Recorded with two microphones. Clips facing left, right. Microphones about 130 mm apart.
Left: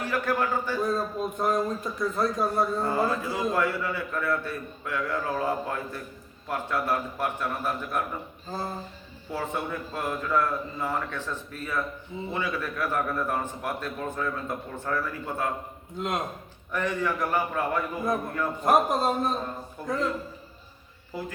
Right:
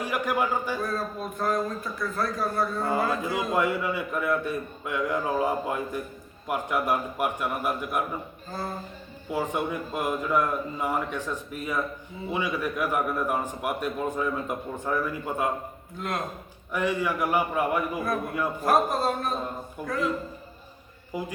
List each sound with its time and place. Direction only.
0.0 s a man's voice: 15° right (ahead or behind)
0.8 s a man's voice: 20° left (ahead or behind)
3.1 s a man's voice: 20° right (ahead or behind)
9.3 s a man's voice: 15° right (ahead or behind)
16.0 s a man's voice: 20° left (ahead or behind)
16.7 s a man's voice: 10° right (ahead or behind)
18.6 s a man's voice: 20° left (ahead or behind)
19.8 s a man's voice: 10° right (ahead or behind)
21.1 s a man's voice: 15° right (ahead or behind)